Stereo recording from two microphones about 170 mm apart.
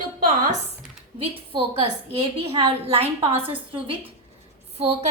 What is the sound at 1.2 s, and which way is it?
A woman's voice, 35° right (ahead or behind).